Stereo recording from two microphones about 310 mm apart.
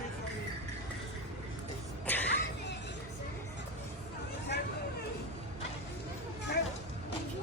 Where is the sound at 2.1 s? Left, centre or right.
Centre.